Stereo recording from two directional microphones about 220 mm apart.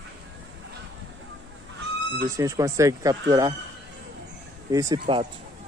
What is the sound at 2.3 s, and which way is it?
Speech, 15° right (ahead or behind).